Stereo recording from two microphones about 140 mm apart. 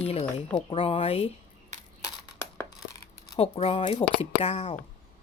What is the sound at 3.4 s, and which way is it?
Speech, 45° left (ahead or behind).